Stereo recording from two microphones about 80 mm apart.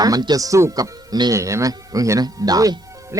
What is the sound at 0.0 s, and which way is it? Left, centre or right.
Speech, right.